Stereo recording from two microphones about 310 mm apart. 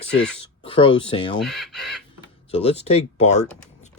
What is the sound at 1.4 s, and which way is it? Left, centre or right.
Speech, centre.